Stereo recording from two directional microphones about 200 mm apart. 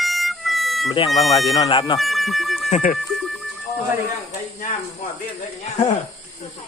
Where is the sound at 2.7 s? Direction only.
35° left (ahead or behind).